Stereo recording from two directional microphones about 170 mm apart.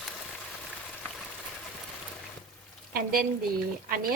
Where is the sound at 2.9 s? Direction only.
60° right (ahead or behind).